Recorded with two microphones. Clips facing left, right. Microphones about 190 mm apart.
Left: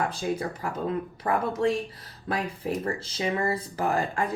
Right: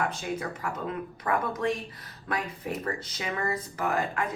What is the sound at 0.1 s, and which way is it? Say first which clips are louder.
A woman's voice: left 4 dB; 35° left (ahead or behind).